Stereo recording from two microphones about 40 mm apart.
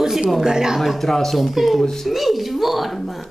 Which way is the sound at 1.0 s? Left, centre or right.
Centre.